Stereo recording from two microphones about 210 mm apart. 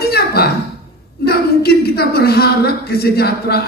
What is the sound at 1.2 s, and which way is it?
A woman's voice, 50° left (ahead or behind).